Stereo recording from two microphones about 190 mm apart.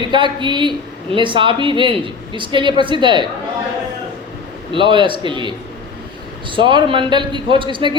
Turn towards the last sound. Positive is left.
turn(degrees=-25)  # may be behind; listen again after turning